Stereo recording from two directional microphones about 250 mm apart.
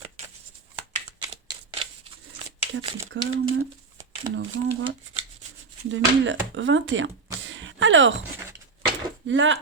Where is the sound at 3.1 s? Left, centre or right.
Right.